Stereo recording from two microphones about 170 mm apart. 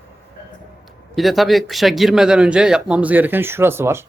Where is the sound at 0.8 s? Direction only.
Centre (ahead or behind).